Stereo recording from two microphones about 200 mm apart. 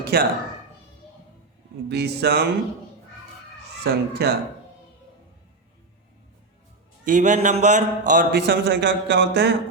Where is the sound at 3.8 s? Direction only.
55° right (ahead or behind).